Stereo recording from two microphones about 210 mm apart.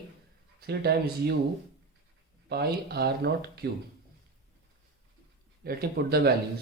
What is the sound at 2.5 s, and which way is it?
Speech, 50° right (ahead or behind).